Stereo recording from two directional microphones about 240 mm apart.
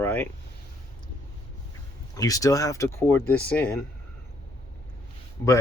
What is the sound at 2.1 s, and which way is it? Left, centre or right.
Speech, centre.